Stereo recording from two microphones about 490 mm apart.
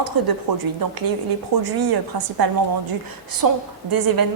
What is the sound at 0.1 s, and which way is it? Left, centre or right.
Speech, right.